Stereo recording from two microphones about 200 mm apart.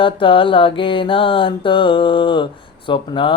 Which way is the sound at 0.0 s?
25° left (ahead or behind).